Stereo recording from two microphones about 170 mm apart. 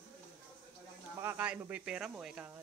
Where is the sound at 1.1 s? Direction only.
10° right (ahead or behind).